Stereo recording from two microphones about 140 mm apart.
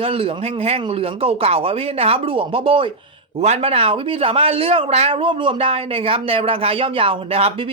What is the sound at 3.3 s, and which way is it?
Speech, 50° right (ahead or behind).